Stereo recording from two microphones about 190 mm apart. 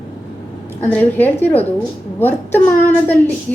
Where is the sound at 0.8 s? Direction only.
10° left (ahead or behind).